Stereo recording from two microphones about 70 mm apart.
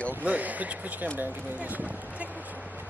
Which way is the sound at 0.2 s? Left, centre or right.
Right.